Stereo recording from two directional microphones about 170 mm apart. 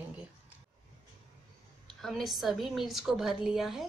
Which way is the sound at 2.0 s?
Centre (ahead or behind).